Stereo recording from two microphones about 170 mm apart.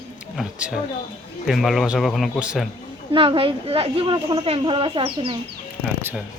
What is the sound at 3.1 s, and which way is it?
Speech, 30° right (ahead or behind).